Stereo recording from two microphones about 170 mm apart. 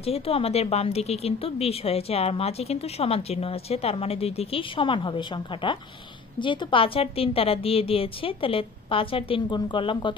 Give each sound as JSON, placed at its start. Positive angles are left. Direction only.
{"t": 0.0, "sound": "speech", "side_deg": 35}